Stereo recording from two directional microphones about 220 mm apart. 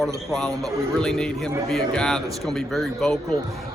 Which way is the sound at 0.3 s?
Centre (ahead or behind).